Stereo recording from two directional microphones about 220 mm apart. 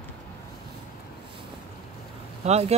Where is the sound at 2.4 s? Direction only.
30° right (ahead or behind).